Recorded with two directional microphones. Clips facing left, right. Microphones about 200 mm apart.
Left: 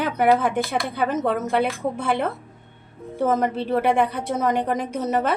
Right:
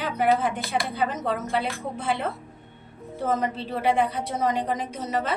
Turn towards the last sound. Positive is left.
turn(degrees=60)  # may be behind; listen again after turning